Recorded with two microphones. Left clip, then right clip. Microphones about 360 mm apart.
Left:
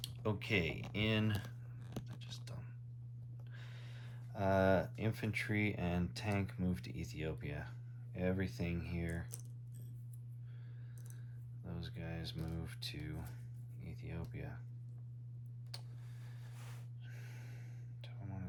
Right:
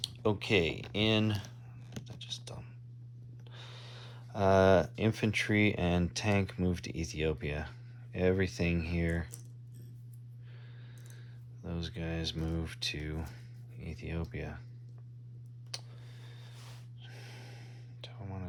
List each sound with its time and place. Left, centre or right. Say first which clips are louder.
0.0 s speech: right 9 dB; centre
1.9 s whispering: right 8 dB; centre
3.5 s speech: right 8 dB; centre
11.6 s speech: right 9 dB; centre
17.0 s gasp: right 10 dB; centre